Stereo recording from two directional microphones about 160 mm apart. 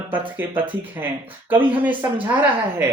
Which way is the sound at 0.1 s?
10° right (ahead or behind).